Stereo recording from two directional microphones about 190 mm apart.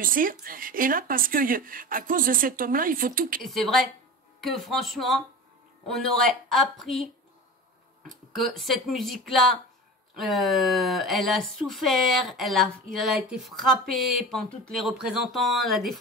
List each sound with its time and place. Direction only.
0.0 s speech: 45° right (ahead or behind)
3.4 s speech: centre (ahead or behind)
8.1 s speech: centre (ahead or behind)